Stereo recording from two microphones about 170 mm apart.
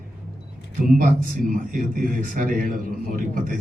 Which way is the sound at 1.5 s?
55° right (ahead or behind).